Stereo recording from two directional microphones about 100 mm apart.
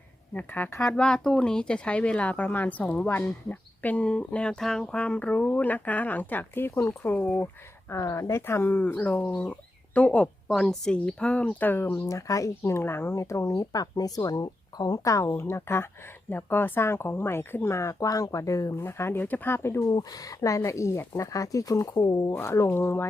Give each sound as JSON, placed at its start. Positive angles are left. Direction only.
{"t": 0.3, "sound": "speech", "side_deg": 20}
{"t": 7.9, "sound": "speech", "side_deg": 30}
{"t": 12.0, "sound": "speech", "side_deg": 30}
{"t": 19.9, "sound": "speech", "side_deg": 35}